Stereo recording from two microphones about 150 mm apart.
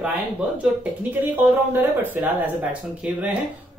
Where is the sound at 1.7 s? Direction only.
15° right (ahead or behind).